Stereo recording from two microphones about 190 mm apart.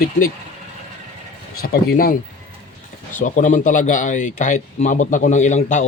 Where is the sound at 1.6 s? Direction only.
55° left (ahead or behind).